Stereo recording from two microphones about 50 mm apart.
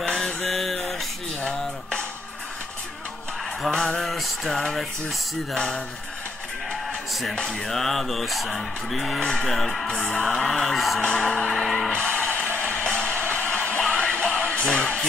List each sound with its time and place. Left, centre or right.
0.0 s mantra: centre
3.7 s music: centre
7.3 s music: centre
11.0 s music: centre
11.9 s music: left
14.7 s music: centre